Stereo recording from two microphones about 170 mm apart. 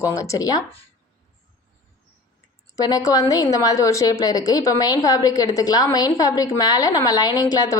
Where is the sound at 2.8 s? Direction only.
20° left (ahead or behind).